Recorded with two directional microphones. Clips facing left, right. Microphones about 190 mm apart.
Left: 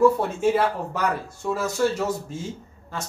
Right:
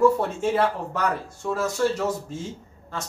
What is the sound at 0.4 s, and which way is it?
Speech, 5° left (ahead or behind).